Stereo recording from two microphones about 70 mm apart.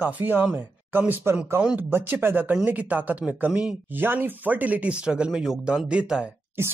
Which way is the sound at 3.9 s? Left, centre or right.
Right.